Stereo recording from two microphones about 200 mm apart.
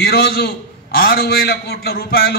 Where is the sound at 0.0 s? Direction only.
50° left (ahead or behind).